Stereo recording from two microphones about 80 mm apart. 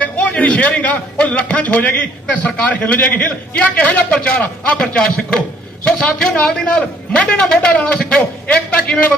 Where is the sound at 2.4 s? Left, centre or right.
Centre.